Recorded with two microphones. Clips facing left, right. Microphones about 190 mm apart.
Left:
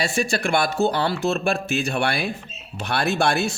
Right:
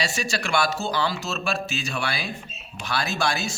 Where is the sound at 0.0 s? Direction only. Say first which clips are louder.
Left 5 dB; 55° left (ahead or behind).